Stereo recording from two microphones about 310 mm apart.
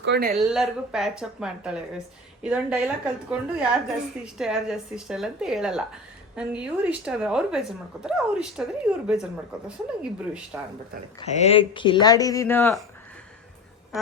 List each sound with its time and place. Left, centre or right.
0.0 s speech: right
0.3 s speech: centre
9.6 s speech: centre
11.2 s speech: left